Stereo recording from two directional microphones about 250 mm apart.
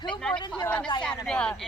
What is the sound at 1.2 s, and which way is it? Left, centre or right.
Speech, centre.